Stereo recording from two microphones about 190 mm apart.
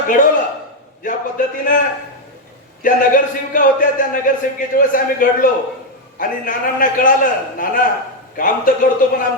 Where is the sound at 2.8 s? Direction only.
45° left (ahead or behind).